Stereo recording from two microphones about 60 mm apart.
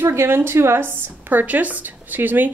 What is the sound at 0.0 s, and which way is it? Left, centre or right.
A woman's voice, right.